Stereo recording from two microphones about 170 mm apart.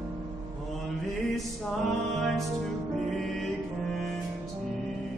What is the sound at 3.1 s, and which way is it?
Music, centre (ahead or behind).